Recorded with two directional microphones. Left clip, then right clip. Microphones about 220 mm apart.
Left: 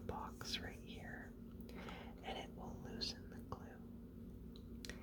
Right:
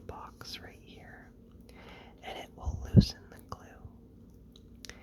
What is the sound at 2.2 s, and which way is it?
Whispering, 20° right (ahead or behind).